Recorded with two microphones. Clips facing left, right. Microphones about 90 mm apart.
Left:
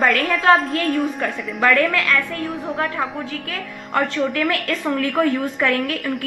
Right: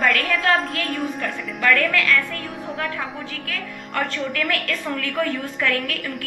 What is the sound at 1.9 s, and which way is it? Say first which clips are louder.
Speech: left 1 dB; 20° left (ahead or behind).